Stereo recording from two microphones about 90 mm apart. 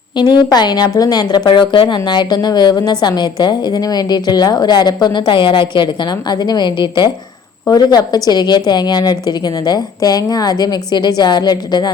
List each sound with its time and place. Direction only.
0.2 s a woman's voice: 55° left (ahead or behind)
1.5 s a woman's voice: 65° left (ahead or behind); by 11.9 s 50° left (ahead or behind)